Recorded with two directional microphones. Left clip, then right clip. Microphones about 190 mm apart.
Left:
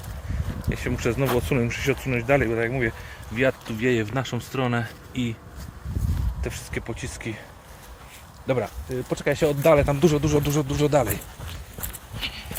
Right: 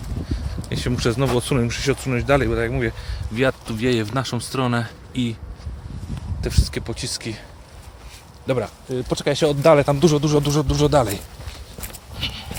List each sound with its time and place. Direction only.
0.7 s speech: 20° right (ahead or behind)
6.4 s speech: 15° right (ahead or behind)
8.4 s speech: 10° right (ahead or behind)
8.9 s speech: 25° right (ahead or behind)
12.2 s a sound: 30° right (ahead or behind)